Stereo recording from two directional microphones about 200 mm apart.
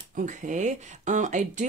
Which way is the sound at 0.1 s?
40° right (ahead or behind).